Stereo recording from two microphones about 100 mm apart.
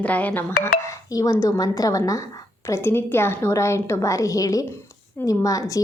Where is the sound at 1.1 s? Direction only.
35° left (ahead or behind).